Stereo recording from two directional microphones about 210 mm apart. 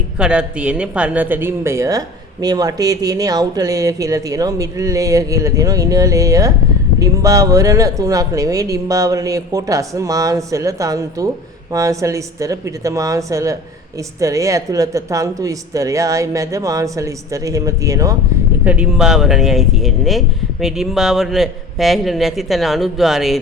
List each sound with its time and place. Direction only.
0.2 s speech: 5° right (ahead or behind)
18.6 s speech: 5° right (ahead or behind)